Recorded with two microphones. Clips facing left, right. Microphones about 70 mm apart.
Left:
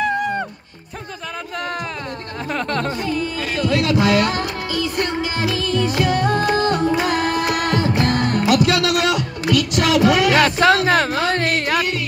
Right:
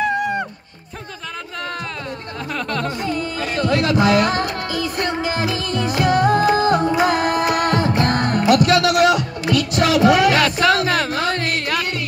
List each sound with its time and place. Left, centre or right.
0.0 s music: centre
2.5 s speech: left
3.5 s music: right
10.3 s music: left